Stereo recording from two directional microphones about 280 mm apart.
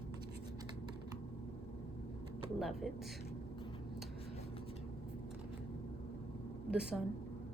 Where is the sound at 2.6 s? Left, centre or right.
Centre.